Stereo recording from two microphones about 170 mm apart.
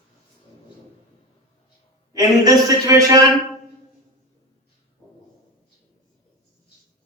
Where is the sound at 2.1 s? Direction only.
20° right (ahead or behind).